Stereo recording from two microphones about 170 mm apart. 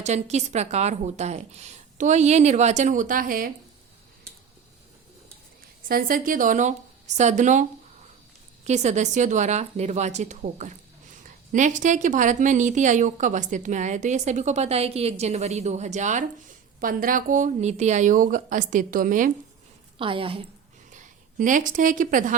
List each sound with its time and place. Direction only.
0.0 s a woman's voice: 40° right (ahead or behind)
5.9 s a woman's voice: 55° right (ahead or behind)
20.0 s a woman's voice: 30° right (ahead or behind)
20.9 s a woman's voice: 50° right (ahead or behind)